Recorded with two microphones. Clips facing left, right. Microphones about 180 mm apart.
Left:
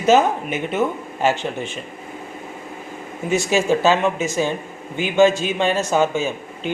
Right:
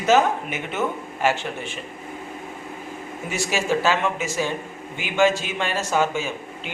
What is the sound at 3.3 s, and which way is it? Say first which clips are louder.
Speech: left 6 dB; 20° left (ahead or behind).